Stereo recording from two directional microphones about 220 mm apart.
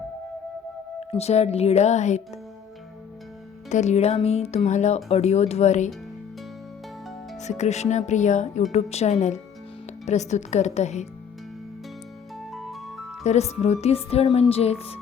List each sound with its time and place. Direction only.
0.9 s music: 30° left (ahead or behind)
3.7 s music: 30° left (ahead or behind)
7.3 s speech: 30° left (ahead or behind)
12.4 s music: centre (ahead or behind)
13.2 s music: 30° left (ahead or behind)